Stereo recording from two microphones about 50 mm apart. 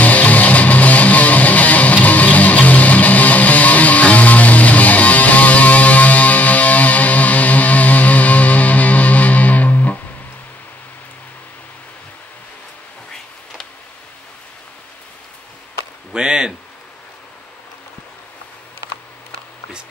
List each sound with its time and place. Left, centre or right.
0.0 s music: left
16.1 s chop: centre